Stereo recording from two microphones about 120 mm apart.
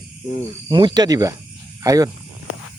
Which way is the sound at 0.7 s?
40° right (ahead or behind).